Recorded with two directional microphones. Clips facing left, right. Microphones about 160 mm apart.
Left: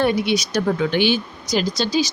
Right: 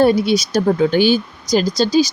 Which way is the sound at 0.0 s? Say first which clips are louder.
Right 5 dB; 35° right (ahead or behind).